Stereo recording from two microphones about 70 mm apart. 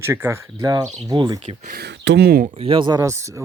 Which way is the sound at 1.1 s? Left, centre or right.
Right.